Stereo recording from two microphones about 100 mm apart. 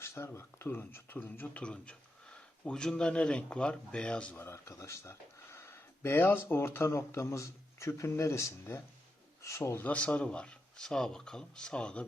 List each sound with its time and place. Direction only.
0.0 s speech: 25° left (ahead or behind); by 4.4 s 10° left (ahead or behind)
4.4 s speech: 25° left (ahead or behind); by 12.0 s 10° left (ahead or behind)